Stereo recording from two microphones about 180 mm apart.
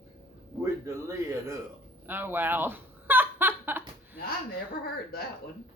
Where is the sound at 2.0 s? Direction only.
10° right (ahead or behind).